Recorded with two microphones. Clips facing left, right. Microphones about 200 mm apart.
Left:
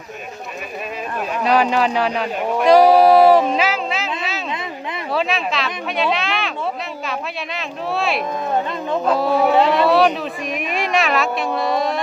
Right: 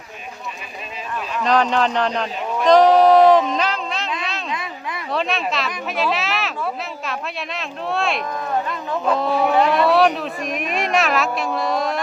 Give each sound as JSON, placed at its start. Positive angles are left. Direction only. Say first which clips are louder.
{"t": 1.5, "sound": "speech", "louder": "left 1 dB", "side_deg": 10}
{"t": 2.6, "sound": "a sound", "louder": "left 1 dB", "side_deg": 10}
{"t": 5.1, "sound": "speech", "louder": "left 1 dB", "side_deg": 0}
{"t": 9.6, "sound": "speech", "louder": "left 1 dB", "side_deg": 25}
{"t": 9.8, "sound": "speech", "louder": "left 1 dB", "side_deg": 0}